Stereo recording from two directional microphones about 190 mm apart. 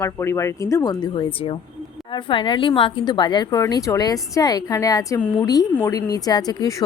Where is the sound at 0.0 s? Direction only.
15° left (ahead or behind).